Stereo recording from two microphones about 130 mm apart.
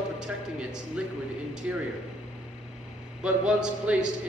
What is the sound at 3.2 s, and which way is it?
Speech, 5° right (ahead or behind).